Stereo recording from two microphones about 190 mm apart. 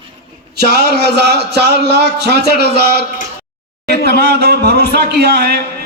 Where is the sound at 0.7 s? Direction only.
60° right (ahead or behind).